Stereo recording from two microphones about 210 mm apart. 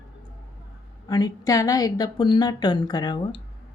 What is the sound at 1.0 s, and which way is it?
A woman's voice, 20° left (ahead or behind).